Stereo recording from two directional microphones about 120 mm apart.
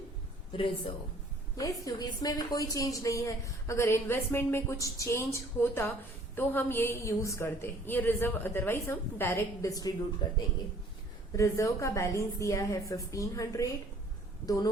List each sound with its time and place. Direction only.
1.5 s a woman's voice: 30° left (ahead or behind)
10.2 s speech: 40° left (ahead or behind)
11.3 s a woman's voice: 25° left (ahead or behind)